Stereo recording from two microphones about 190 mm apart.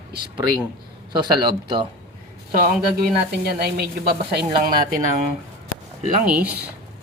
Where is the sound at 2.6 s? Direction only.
50° right (ahead or behind).